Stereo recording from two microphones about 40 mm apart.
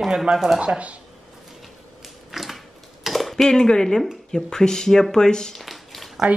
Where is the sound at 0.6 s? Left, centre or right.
Right.